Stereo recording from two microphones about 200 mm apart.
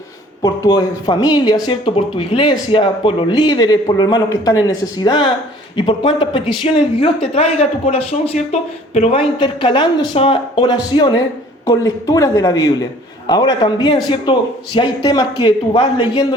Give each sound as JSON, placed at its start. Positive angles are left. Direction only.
{"t": 0.4, "sound": "speech", "side_deg": 15}